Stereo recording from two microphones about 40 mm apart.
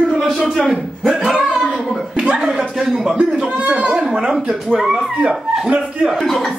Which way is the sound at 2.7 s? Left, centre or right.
Centre.